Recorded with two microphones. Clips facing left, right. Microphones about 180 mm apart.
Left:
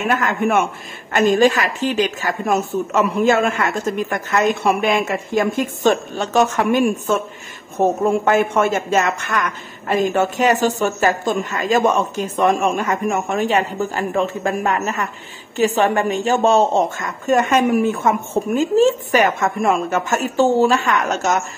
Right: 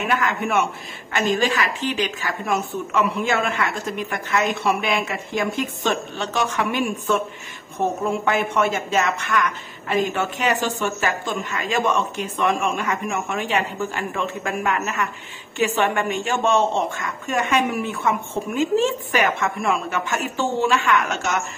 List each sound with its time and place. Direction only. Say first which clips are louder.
0.1 s speech: left 4 dB; 45° left (ahead or behind)